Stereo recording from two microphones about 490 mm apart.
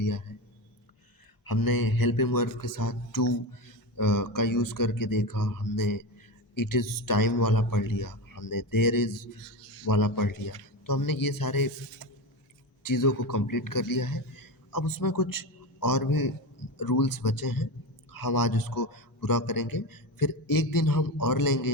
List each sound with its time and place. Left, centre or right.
0.3 s a sound: left
1.5 s a man's voice: left
12.8 s a man's voice: left